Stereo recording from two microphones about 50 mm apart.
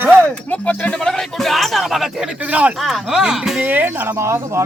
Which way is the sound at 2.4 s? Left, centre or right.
Right.